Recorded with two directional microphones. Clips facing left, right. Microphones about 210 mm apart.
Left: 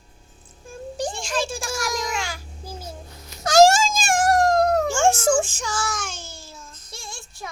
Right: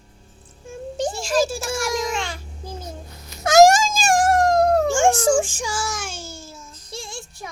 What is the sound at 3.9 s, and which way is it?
Music, 35° right (ahead or behind).